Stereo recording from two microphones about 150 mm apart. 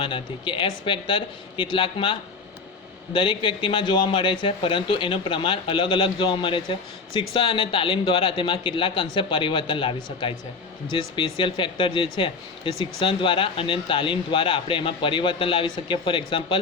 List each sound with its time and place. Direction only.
0.0 s a man's voice: 35° left (ahead or behind)